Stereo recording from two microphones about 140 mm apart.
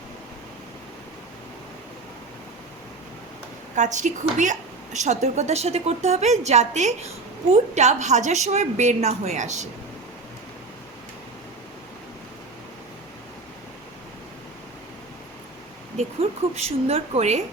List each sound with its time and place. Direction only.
3.8 s a woman's voice: 60° right (ahead or behind)
16.6 s a woman's voice: 50° right (ahead or behind)